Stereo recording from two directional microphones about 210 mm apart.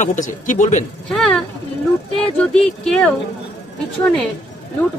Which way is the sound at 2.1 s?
5° left (ahead or behind).